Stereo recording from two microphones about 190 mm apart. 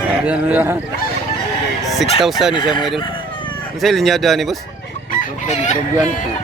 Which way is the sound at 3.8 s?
Centre (ahead or behind).